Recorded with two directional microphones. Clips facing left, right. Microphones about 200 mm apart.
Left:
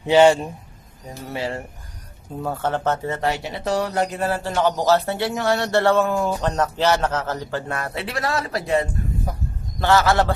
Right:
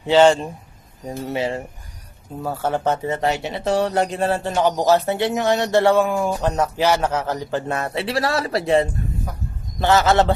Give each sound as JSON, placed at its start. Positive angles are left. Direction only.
{"t": 0.0, "sound": "a man's voice", "side_deg": 15}
{"t": 1.3, "sound": "a man's voice", "side_deg": -20}
{"t": 2.4, "sound": "a man's voice", "side_deg": -5}